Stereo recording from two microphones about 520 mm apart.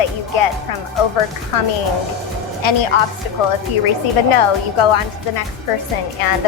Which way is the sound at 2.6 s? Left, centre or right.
Left.